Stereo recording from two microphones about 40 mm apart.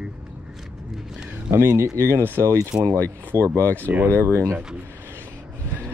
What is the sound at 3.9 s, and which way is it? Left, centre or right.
Speech, right.